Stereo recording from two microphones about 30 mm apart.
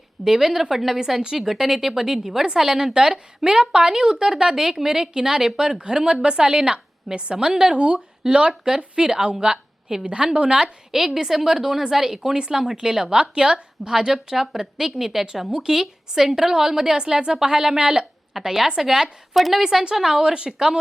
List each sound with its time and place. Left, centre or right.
0.3 s a woman's voice: centre
7.8 s a woman's voice: right
10.6 s a woman's voice: centre; by 13.9 s right
14.1 s a woman's voice: centre
18.4 s a woman's voice: centre
19.9 s a woman's voice: centre